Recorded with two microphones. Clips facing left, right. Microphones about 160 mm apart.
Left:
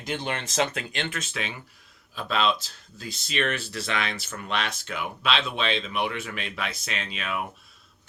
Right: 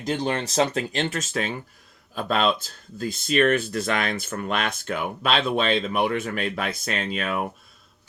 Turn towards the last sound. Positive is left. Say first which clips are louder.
# right 5 dB
turn(degrees=-45)  # may be behind; listen again after turning